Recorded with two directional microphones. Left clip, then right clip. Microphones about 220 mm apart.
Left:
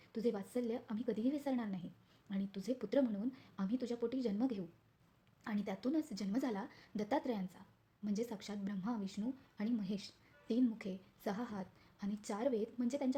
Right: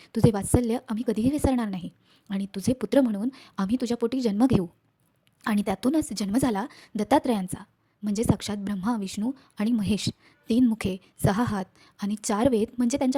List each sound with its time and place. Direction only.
0.0 s a woman's voice: 35° right (ahead or behind)